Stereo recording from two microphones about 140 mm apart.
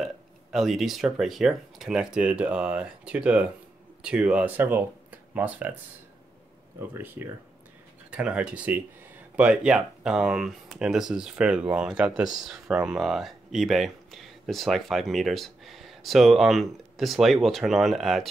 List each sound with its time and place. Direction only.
0.0 s speech: 5° right (ahead or behind)
6.9 s speech: 15° right (ahead or behind); by 18.3 s centre (ahead or behind)